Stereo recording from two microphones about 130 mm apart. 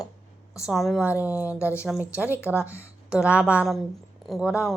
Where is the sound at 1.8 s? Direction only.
5° right (ahead or behind).